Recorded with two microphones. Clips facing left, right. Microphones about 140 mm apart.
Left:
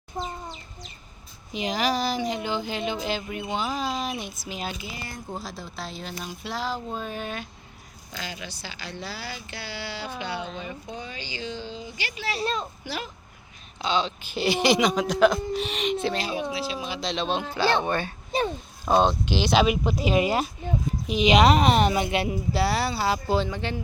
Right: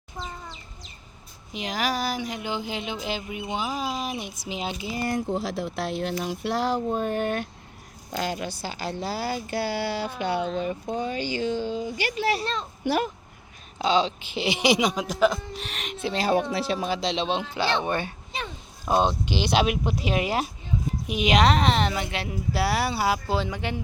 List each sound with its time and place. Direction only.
0.1 s a sound: 30° left (ahead or behind)
1.5 s speech: centre (ahead or behind); by 4.9 s 20° right (ahead or behind)
5.1 s speech: 75° right (ahead or behind); by 12.1 s 50° right (ahead or behind)
12.4 s a woman's voice: 10° left (ahead or behind)
12.8 s speech: 55° right (ahead or behind)
13.7 s speech: 35° right (ahead or behind)
14.3 s speech: 20° right (ahead or behind)
16.2 s speech: 65° right (ahead or behind)
16.9 s speech: 30° right (ahead or behind)
18.3 s oink: 40° left (ahead or behind)
18.9 s speech: 10° right (ahead or behind)
19.6 s speech: 65° right (ahead or behind)
20.1 s a woman's voice: 5° right (ahead or behind); by 22.3 s 15° left (ahead or behind)
22.5 s speech: 10° right (ahead or behind)